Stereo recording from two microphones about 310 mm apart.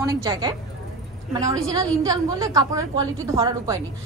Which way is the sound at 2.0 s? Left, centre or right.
Centre.